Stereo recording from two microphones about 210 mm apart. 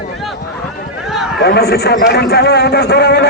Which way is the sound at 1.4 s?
50° left (ahead or behind).